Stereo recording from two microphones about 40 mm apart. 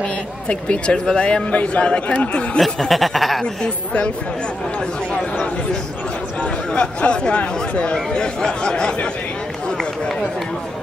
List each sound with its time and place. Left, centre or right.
0.5 s speech: left
2.9 s speech: centre
3.6 s a woman's voice: left
6.4 s speech: left